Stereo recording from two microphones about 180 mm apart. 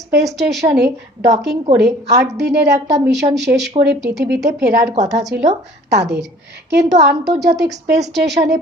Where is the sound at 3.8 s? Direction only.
70° right (ahead or behind).